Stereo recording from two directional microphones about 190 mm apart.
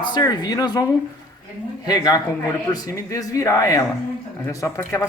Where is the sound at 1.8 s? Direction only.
20° left (ahead or behind).